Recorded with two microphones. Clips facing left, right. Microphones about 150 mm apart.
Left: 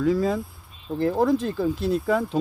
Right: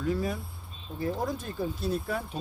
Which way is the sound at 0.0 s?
90° left.